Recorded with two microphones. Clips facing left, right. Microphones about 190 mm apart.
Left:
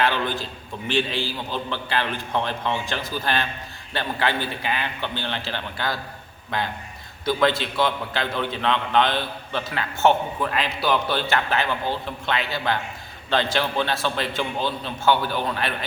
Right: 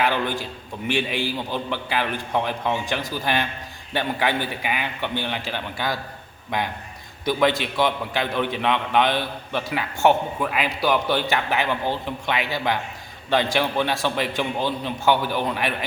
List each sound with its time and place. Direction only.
0.0 s a man's voice: 10° right (ahead or behind)